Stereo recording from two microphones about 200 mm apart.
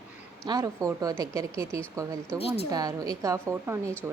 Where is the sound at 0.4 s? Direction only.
15° right (ahead or behind).